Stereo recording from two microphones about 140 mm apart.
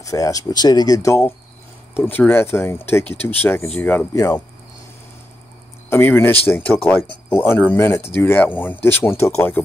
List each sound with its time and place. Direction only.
0.0 s speech: 25° left (ahead or behind)
5.9 s speech: 15° left (ahead or behind)